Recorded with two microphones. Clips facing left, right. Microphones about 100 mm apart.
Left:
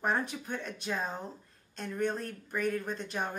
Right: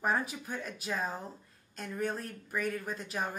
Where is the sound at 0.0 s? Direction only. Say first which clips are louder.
Even; 5° right (ahead or behind).